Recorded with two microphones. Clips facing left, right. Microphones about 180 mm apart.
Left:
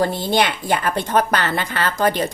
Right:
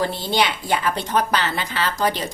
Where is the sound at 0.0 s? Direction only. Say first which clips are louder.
Left 3 dB; 50° left (ahead or behind).